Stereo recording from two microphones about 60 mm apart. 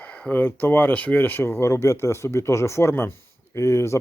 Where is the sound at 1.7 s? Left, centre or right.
Left.